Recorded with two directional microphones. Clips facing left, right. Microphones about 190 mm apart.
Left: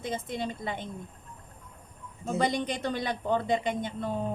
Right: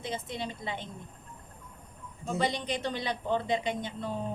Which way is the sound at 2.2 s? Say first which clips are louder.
Left 3 dB; 50° left (ahead or behind).